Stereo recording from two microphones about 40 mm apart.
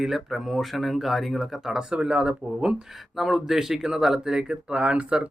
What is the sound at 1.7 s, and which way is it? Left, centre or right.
Speech, right.